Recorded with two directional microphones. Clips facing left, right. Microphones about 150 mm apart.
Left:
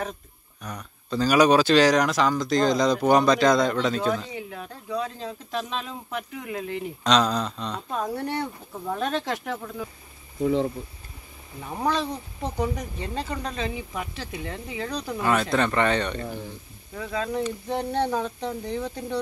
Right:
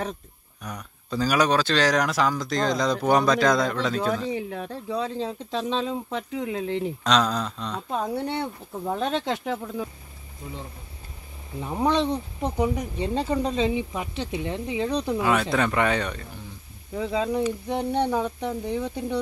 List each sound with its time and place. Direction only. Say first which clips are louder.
0.6 s speech: even; 10° right (ahead or behind)
4.3 s speech: right 6 dB; 35° right (ahead or behind)
7.0 s speech: left 3 dB; centre (ahead or behind)
7.9 s speech: right 1 dB; 25° right (ahead or behind)
10.4 s speech: left 16 dB; 90° left
11.6 s speech: right 3 dB; 20° right (ahead or behind)
15.1 s speech: left 3 dB; 5° right (ahead or behind)
16.9 s speech: right 3 dB; 20° right (ahead or behind)